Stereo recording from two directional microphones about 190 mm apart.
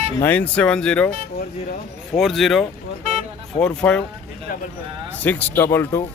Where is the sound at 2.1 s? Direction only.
Centre (ahead or behind).